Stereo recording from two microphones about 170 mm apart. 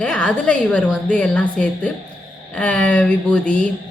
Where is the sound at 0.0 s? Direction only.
5° left (ahead or behind).